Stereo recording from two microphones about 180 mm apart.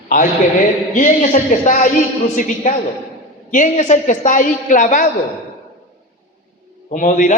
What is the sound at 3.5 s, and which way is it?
A man's voice, 40° left (ahead or behind).